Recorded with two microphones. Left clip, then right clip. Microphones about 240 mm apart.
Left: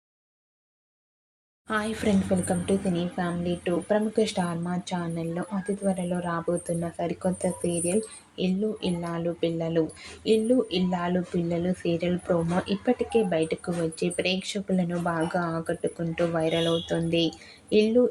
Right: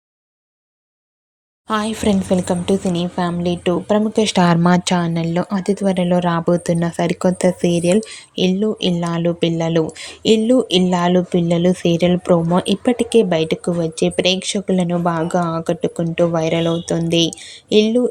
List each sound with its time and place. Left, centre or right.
1.6 s speech: right